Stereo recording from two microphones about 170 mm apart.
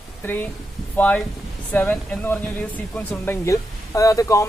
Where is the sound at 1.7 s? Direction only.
10° left (ahead or behind).